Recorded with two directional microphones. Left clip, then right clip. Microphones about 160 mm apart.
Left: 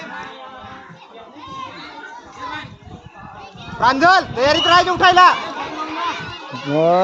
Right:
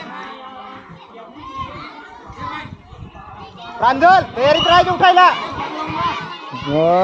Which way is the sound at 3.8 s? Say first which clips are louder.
Right 2 dB; 90° left.